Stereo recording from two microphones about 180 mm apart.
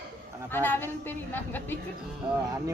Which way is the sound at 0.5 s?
10° left (ahead or behind).